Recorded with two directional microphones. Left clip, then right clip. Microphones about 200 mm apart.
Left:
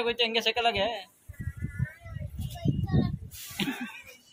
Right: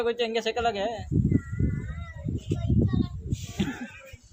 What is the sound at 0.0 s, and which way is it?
Speech, 45° right (ahead or behind).